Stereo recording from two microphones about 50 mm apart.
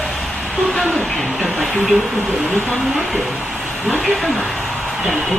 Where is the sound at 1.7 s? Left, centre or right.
Centre.